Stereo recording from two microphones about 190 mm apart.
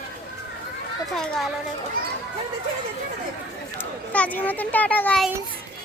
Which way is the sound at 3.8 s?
10° left (ahead or behind).